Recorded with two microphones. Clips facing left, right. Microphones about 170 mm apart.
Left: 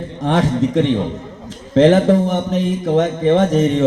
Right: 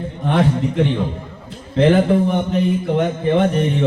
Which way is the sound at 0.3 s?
90° left.